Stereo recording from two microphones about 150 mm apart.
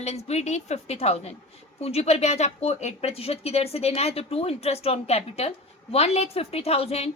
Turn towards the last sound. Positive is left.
turn(degrees=45)  # may be behind; listen again after turning